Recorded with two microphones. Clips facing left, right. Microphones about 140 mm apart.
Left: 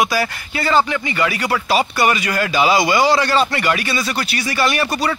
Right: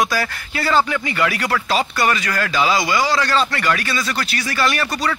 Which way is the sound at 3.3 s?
15° left (ahead or behind).